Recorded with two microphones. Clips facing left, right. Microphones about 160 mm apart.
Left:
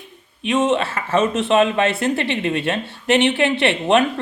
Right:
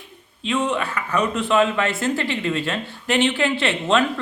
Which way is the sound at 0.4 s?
20° left (ahead or behind).